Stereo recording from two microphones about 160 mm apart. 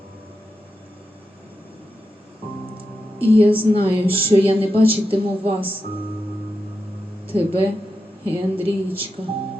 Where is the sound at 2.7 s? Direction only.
35° right (ahead or behind).